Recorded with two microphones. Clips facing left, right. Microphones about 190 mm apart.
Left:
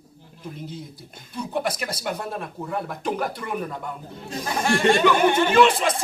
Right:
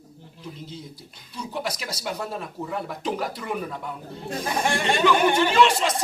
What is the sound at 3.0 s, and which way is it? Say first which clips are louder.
Speech: left 1 dB; 55° left (ahead or behind).